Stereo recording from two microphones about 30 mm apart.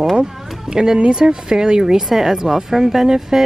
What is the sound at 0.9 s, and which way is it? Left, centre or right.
Speech, right.